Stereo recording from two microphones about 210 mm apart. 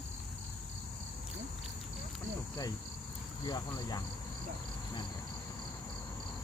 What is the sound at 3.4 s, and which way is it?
Speech, 20° left (ahead or behind).